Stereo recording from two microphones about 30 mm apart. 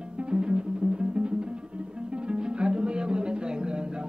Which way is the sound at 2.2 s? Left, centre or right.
Right.